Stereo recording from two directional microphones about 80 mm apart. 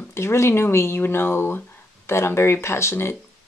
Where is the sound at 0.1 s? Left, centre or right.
Left.